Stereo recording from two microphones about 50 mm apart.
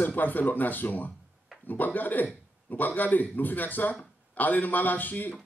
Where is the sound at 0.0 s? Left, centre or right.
Left.